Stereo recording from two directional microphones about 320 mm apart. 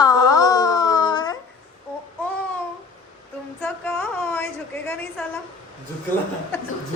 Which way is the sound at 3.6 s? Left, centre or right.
Centre.